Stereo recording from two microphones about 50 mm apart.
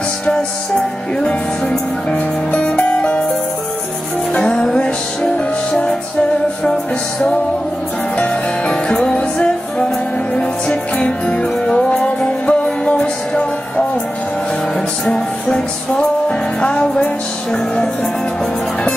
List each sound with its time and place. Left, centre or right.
1.2 s music: left
4.3 s music: left
8.2 s music: left
15.0 s music: centre